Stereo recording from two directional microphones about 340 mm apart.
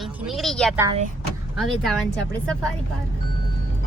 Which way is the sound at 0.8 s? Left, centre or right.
Centre.